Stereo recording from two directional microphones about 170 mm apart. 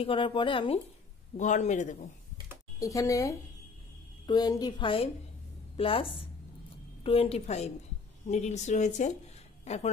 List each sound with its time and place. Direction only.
0.0 s a woman's voice: 30° left (ahead or behind)
1.3 s speech: 45° left (ahead or behind)
2.8 s a woman's voice: 20° left (ahead or behind); by 9.8 s 40° left (ahead or behind)